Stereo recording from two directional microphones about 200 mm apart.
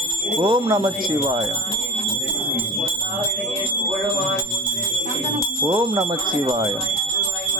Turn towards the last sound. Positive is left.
turn(degrees=-20)  # may be behind; listen again after turning